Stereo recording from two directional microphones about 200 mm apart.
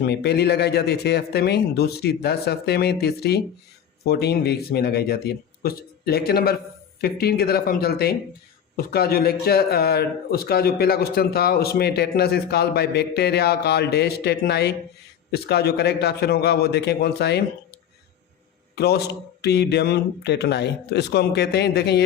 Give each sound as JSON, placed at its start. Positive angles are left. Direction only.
{"t": 0.0, "sound": "a man's voice", "side_deg": 55}
{"t": 18.8, "sound": "speech", "side_deg": 55}